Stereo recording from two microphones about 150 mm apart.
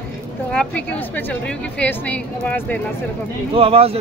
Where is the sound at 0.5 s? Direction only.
5° left (ahead or behind).